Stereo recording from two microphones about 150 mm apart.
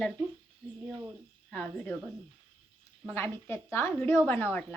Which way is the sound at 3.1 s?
15° left (ahead or behind).